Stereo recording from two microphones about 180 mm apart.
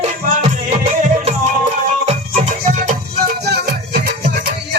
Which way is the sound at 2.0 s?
40° right (ahead or behind).